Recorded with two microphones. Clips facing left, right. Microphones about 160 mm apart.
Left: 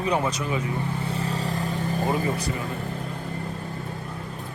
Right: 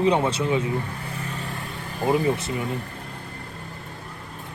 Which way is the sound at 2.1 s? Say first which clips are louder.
Right 8 dB; 25° right (ahead or behind).